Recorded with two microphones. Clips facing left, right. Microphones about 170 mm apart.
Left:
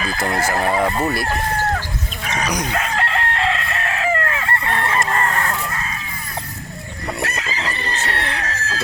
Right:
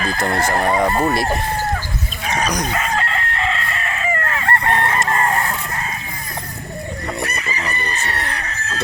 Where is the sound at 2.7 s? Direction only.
65° left (ahead or behind).